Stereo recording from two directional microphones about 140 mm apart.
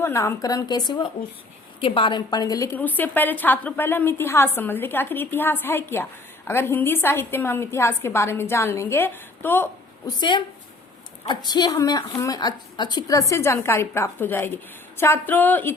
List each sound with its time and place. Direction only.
0.0 s a woman's voice: 20° left (ahead or behind)
2.7 s a woman's voice: 10° left (ahead or behind)
10.1 s a woman's voice: 30° left (ahead or behind); by 15.7 s 15° left (ahead or behind)